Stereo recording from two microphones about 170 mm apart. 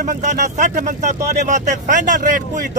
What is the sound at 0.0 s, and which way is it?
Speech, 45° right (ahead or behind).